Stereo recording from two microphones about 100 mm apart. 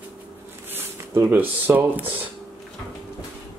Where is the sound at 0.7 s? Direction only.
25° right (ahead or behind).